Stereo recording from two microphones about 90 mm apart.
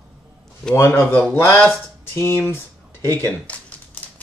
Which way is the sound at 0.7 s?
25° left (ahead or behind).